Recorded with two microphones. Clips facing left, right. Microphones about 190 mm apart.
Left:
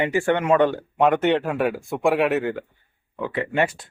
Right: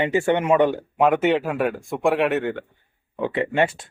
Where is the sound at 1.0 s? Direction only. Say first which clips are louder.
Even; 5° right (ahead or behind).